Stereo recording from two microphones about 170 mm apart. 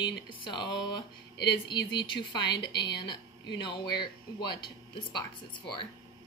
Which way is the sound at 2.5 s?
90° left.